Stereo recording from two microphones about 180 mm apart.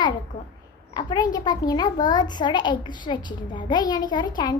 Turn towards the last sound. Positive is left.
turn(degrees=25)  # may be behind; listen again after turning